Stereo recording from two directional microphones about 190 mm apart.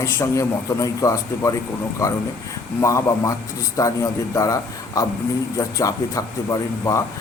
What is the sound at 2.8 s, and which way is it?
A man's voice, 15° left (ahead or behind).